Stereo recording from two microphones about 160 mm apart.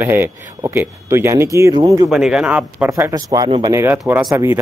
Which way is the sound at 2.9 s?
20° right (ahead or behind).